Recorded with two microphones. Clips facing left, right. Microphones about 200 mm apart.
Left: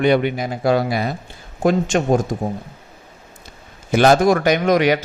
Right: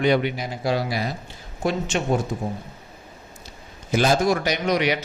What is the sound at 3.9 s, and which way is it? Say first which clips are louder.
Speech: left 6 dB; 65° left (ahead or behind).